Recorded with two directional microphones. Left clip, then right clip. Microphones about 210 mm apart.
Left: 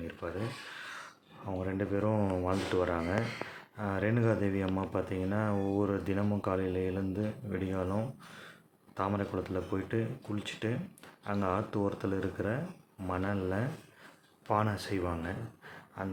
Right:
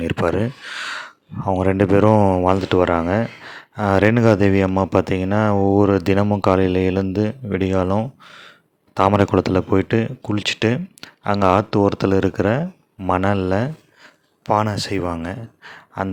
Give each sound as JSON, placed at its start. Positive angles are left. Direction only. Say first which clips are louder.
{"t": 0.0, "sound": "speech", "louder": "right 19 dB", "side_deg": -50}